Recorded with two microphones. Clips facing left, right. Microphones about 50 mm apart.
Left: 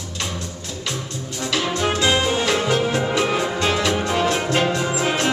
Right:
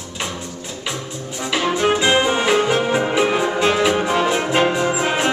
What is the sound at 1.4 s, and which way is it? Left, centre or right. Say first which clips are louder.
Music: right 3 dB; centre.